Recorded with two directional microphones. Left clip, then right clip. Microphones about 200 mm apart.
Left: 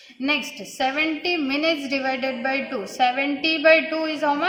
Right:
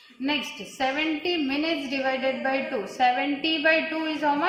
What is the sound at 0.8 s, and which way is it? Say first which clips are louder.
A woman's voice: left 3 dB; 50° left (ahead or behind).